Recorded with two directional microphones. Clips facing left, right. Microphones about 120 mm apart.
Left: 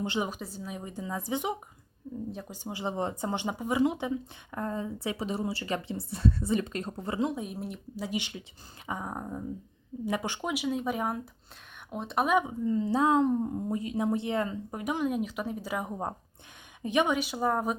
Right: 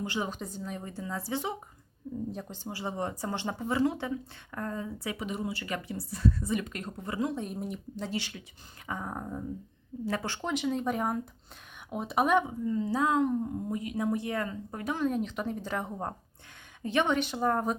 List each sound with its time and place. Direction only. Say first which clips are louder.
0.0 s speech: left 2 dB; 25° left (ahead or behind)
0.3 s speech: right 1 dB; 5° left (ahead or behind)
2.3 s speech: right 1 dB; centre (ahead or behind)
2.6 s speech: left 3 dB; 20° left (ahead or behind)
7.3 s speech: right 1 dB; 5° left (ahead or behind)
8.1 s speech: left 1 dB; 20° left (ahead or behind); by 12.5 s 5° left (ahead or behind)
12.5 s speech: left 2 dB; 30° left (ahead or behind); by 17.7 s 5° left (ahead or behind)